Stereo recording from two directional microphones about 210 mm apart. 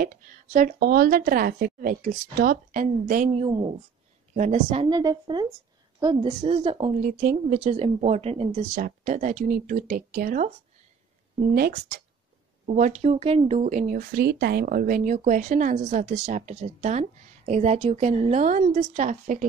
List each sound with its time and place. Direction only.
0.0 s speech: 40° right (ahead or behind)
3.3 s a woman's voice: 25° right (ahead or behind); by 10.5 s 40° right (ahead or behind)
11.5 s speech: 45° right (ahead or behind)
12.6 s speech: 35° right (ahead or behind)